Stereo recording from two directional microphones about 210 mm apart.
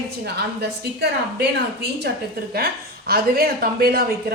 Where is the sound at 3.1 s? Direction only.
45° right (ahead or behind).